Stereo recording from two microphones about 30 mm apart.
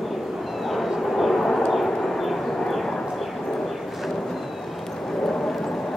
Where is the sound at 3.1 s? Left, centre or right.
Centre.